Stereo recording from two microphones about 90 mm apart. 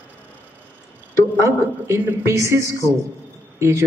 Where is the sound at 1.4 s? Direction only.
30° right (ahead or behind).